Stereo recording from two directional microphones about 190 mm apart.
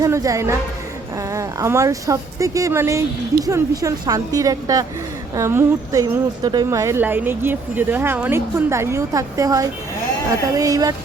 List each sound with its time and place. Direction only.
0.0 s a woman's voice: 15° right (ahead or behind)